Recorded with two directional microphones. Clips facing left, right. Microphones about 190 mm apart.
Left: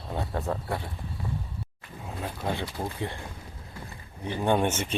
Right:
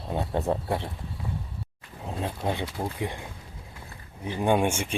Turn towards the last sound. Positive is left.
turn(degrees=-10)  # may be behind; listen again after turning